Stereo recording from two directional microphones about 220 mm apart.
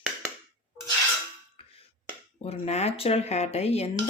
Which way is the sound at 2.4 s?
30° left (ahead or behind).